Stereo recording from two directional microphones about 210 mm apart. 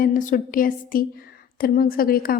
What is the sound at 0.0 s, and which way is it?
A woman's voice, 40° left (ahead or behind).